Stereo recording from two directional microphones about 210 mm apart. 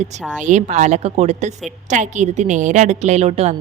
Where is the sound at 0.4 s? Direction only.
35° right (ahead or behind).